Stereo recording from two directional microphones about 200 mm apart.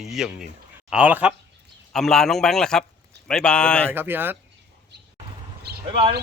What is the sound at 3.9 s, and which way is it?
Speech, 10° right (ahead or behind).